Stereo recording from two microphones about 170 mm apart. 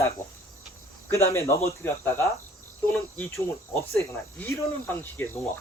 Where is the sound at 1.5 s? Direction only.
15° left (ahead or behind).